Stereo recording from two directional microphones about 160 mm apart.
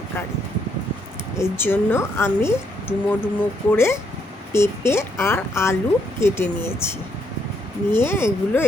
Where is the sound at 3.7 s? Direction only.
15° left (ahead or behind).